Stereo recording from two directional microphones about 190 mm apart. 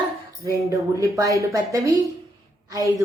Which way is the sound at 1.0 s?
15° right (ahead or behind).